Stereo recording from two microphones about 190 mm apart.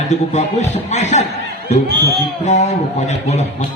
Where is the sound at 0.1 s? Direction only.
35° left (ahead or behind).